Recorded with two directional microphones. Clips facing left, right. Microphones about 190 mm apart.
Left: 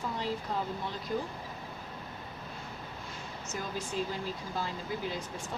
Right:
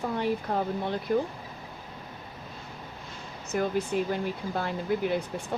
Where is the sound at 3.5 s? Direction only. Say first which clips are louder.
Right 9 dB; 60° right (ahead or behind).